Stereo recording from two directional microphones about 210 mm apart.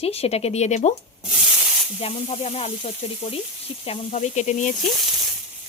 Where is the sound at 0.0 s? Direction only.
30° left (ahead or behind).